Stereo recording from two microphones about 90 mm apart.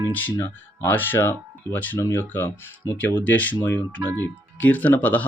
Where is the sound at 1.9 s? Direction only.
35° left (ahead or behind).